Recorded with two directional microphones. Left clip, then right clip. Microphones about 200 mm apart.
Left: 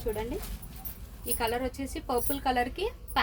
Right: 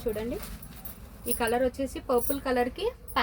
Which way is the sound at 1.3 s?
25° left (ahead or behind).